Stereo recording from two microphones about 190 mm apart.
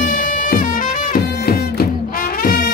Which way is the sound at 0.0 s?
45° left (ahead or behind).